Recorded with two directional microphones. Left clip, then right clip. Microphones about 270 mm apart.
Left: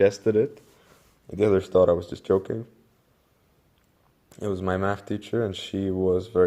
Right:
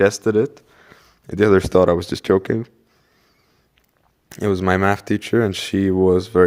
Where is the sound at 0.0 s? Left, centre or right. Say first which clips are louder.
Right 4 dB; right.